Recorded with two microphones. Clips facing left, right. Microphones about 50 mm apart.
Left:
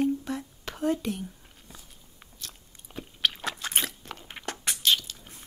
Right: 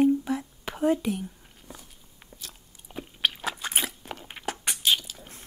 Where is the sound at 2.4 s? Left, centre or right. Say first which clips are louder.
Left 2 dB; centre.